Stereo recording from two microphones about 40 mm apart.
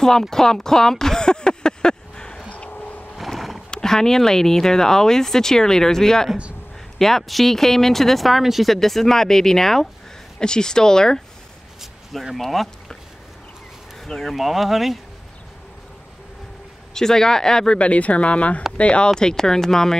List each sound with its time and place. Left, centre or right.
0.0 s a sound: centre
2.5 s a sound: left
3.2 s a sound: centre
3.7 s speech: centre
8.7 s speech: centre
10.4 s speech: centre
11.8 s a sound: centre
12.4 s speech: centre
14.0 s speech: centre
14.3 s speech: centre
16.9 s speech: centre
17.7 s speech: left
19.0 s speech: centre